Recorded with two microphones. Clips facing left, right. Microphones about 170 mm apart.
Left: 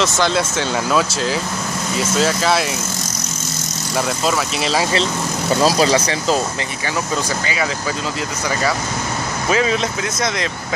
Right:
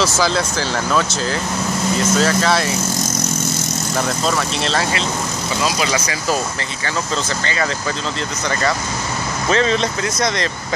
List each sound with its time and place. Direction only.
0.0 s speech: centre (ahead or behind)
4.3 s speech: 5° left (ahead or behind)
5.6 s speech: 35° left (ahead or behind)
7.4 s speech: 10° left (ahead or behind)
9.5 s speech: 5° left (ahead or behind)